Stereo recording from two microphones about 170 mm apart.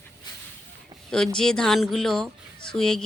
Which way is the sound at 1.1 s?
5° left (ahead or behind).